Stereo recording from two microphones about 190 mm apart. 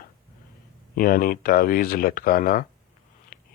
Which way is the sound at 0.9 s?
50° left (ahead or behind).